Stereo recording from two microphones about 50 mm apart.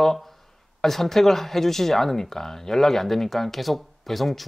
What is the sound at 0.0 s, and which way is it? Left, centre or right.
Speech, centre.